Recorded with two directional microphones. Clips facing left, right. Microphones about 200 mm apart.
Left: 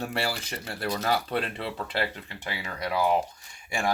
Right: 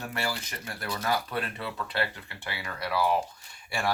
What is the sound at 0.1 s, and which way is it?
Speech, 30° left (ahead or behind).